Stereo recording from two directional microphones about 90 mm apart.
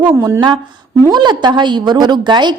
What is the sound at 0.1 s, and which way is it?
Speech, 30° right (ahead or behind).